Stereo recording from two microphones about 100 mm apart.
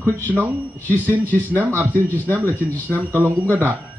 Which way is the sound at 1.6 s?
25° right (ahead or behind).